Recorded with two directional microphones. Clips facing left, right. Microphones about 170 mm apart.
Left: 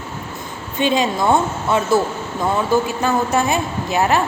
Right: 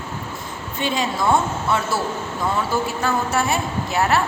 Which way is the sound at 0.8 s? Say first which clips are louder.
Left 5 dB; 20° left (ahead or behind).